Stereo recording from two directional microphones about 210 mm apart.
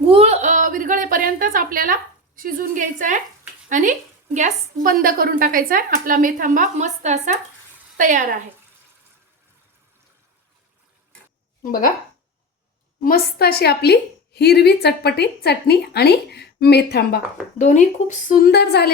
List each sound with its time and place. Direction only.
0.0 s a sound: 25° right (ahead or behind)
3.7 s a woman's voice: 35° right (ahead or behind)
11.6 s speech: 40° left (ahead or behind)
13.0 s a woman's voice: 45° left (ahead or behind)
17.6 s a woman's voice: 35° left (ahead or behind); by 18.9 s 50° left (ahead or behind)